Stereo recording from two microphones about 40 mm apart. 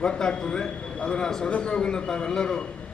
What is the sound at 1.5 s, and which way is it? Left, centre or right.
A man's voice, left.